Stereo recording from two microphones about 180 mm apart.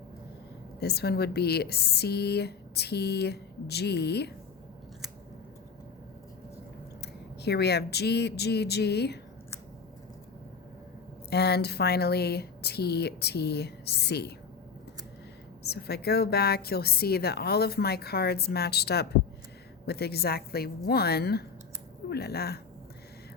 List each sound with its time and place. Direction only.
0.8 s speech: 65° left (ahead or behind)
7.0 s speech: 65° left (ahead or behind)
11.3 s speech: 65° left (ahead or behind)
15.6 s speech: 65° left (ahead or behind)